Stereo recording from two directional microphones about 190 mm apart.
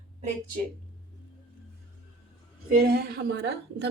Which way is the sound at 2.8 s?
55° right (ahead or behind).